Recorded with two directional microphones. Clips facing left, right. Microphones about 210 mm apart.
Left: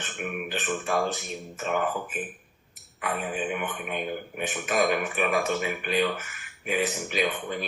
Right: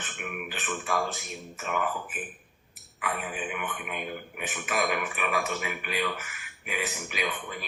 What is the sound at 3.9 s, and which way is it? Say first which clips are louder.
Speech: left 5 dB; 30° left (ahead or behind).